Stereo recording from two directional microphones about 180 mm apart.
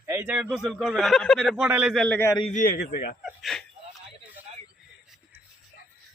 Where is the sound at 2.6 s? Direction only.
55° left (ahead or behind).